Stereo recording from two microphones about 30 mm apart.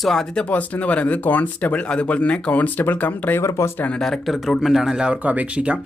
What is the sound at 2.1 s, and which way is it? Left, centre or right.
Speech, left.